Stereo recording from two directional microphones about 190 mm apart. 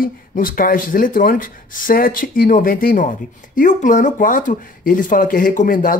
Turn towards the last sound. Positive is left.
turn(degrees=45)  # may be behind; listen again after turning